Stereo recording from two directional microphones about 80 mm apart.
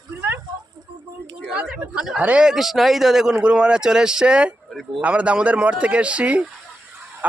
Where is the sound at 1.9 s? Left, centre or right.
Centre.